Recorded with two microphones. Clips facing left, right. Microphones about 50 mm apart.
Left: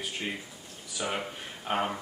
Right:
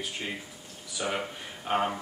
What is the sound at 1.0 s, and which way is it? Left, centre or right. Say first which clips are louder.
Speech: right 1 dB; centre.